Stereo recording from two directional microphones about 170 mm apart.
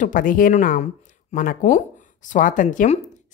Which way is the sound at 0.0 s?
50° left (ahead or behind).